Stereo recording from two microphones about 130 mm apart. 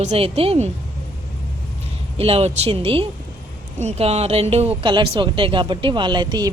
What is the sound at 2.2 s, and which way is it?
Speech, 50° right (ahead or behind).